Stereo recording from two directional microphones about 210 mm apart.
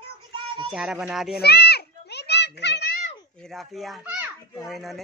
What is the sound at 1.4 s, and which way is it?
Children playing, 50° left (ahead or behind).